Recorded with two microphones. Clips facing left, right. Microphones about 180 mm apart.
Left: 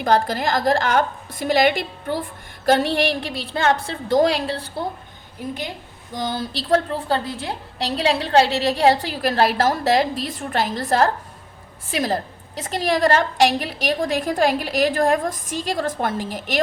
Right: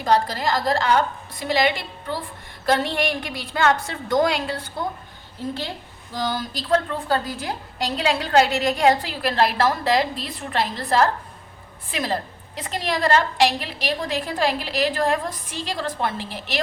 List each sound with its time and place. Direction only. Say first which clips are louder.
0.0 s a woman's voice: left 2 dB; 55° left (ahead or behind)
2.9 s a woman's voice: left 3 dB; 35° left (ahead or behind)
5.4 s a woman's voice: even; 15° left (ahead or behind); by 16.6 s 45° left (ahead or behind)